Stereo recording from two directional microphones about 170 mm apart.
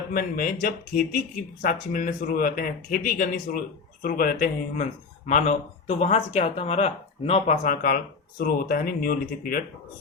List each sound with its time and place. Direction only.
0.1 s speech: 55° left (ahead or behind)